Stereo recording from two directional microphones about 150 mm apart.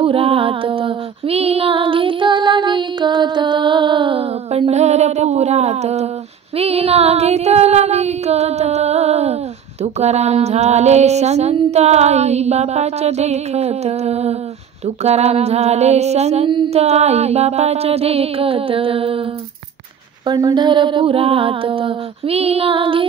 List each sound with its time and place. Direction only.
0.0 s female singing: 40° right (ahead or behind)
6.5 s child singing: 40° right (ahead or behind)
20.2 s a sound: 30° right (ahead or behind)